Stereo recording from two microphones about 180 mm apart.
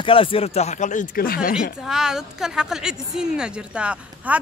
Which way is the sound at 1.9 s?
5° right (ahead or behind).